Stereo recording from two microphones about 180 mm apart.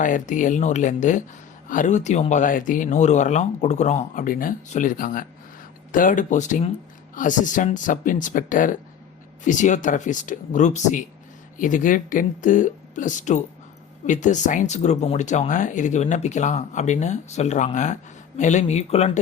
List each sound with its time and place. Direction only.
0.0 s speech: 45° left (ahead or behind)